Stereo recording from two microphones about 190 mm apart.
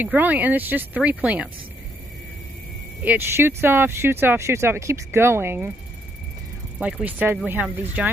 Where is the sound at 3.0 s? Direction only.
10° right (ahead or behind).